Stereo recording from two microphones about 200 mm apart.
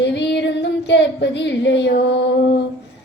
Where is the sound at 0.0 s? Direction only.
60° left (ahead or behind).